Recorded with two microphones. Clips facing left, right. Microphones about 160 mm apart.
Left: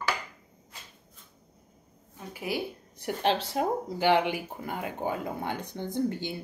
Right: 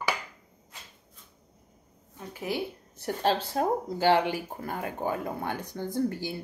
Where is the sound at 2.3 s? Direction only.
10° left (ahead or behind).